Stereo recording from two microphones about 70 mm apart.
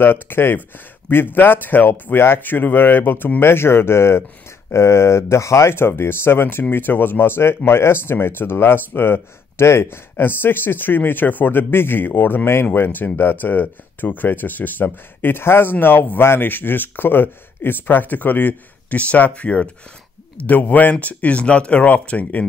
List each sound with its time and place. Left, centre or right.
0.0 s speech: left